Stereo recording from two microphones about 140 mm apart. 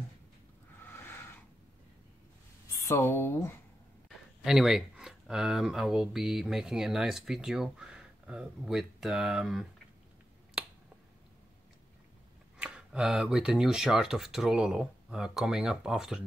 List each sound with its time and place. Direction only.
0.8 s a sound: 15° left (ahead or behind)
2.9 s speech: 20° left (ahead or behind)
4.4 s speech: 5° right (ahead or behind)
10.6 s finger snapping: 5° right (ahead or behind)
12.5 s speech: 5° right (ahead or behind)